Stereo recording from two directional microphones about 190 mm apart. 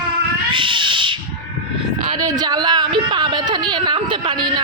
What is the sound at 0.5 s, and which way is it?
Cat, 25° right (ahead or behind).